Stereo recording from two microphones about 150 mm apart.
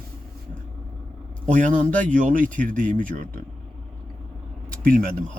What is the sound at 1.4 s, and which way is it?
Speech, 60° right (ahead or behind).